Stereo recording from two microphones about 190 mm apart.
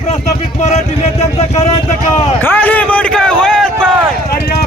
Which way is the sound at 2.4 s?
10° left (ahead or behind).